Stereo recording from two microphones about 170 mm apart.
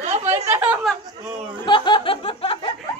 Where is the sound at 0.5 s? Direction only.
10° right (ahead or behind).